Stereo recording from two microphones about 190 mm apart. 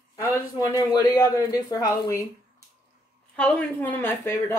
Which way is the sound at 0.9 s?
20° left (ahead or behind).